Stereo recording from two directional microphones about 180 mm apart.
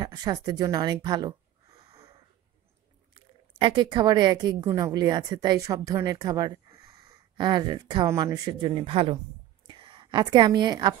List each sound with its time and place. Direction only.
0.0 s speech: 20° right (ahead or behind)
3.2 s a woman's voice: 25° right (ahead or behind)